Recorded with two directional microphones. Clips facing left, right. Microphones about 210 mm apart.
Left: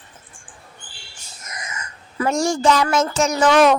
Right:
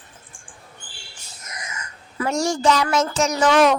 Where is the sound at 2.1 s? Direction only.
50° left (ahead or behind).